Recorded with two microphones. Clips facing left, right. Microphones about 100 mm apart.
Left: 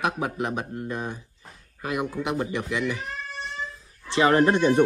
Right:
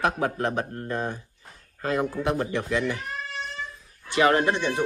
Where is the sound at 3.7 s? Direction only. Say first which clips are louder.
Even; 30° left (ahead or behind).